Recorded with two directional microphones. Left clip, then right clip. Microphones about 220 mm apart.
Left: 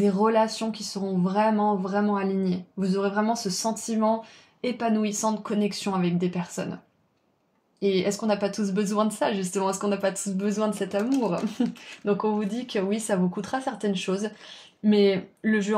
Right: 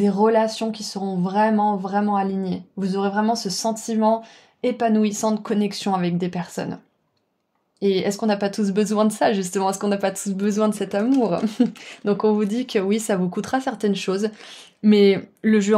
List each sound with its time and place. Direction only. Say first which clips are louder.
0.0 s speech: right 4 dB; 45° right (ahead or behind)
7.8 s speech: right 4 dB; 45° right (ahead or behind)